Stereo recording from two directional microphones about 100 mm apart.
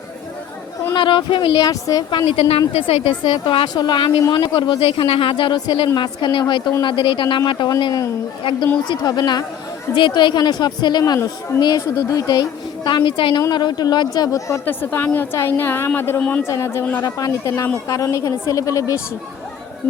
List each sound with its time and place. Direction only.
0.9 s speech: 55° left (ahead or behind); by 14.6 s 35° left (ahead or behind)
14.6 s a woman's voice: 20° left (ahead or behind)